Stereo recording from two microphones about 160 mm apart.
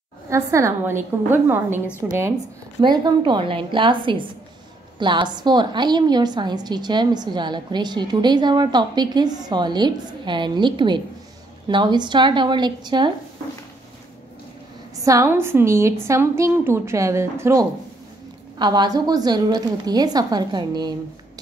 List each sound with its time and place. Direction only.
0.3 s a woman's voice: 20° right (ahead or behind)
2.8 s a woman's voice: 25° right (ahead or behind)
15.0 s a woman's voice: 15° right (ahead or behind)